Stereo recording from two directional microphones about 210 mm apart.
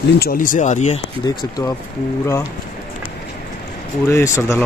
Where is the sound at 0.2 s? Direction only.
40° left (ahead or behind).